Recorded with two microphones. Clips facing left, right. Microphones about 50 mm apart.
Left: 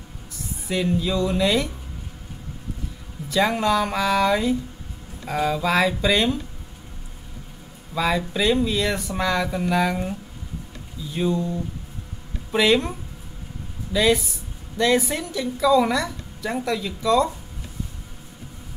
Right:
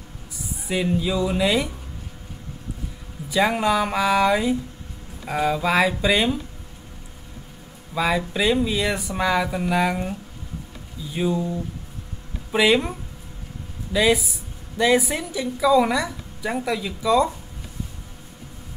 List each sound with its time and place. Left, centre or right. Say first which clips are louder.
0.7 s a woman's voice: even; centre
3.3 s a woman's voice: even; centre
7.9 s a woman's voice: even; centre
11.1 s a woman's voice: even; centre
13.9 s a woman's voice: even; centre